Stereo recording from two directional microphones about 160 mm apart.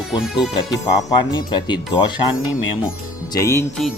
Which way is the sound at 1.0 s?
25° left (ahead or behind).